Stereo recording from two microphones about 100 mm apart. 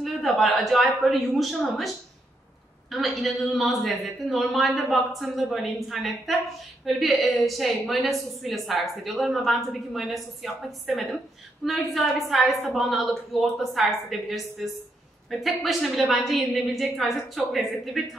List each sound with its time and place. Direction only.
0.0 s a woman's voice: centre (ahead or behind)
2.9 s a woman's voice: centre (ahead or behind)